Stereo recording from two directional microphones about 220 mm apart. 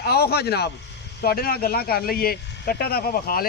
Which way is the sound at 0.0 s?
45° left (ahead or behind).